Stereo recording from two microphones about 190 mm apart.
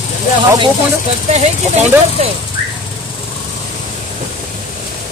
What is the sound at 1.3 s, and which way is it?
Speech, 35° right (ahead or behind).